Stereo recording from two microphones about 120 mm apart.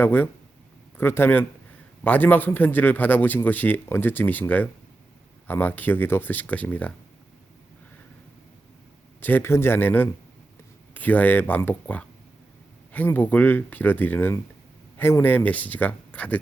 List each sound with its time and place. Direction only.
0.0 s a man's voice: 15° left (ahead or behind)
9.2 s a man's voice: 20° left (ahead or behind)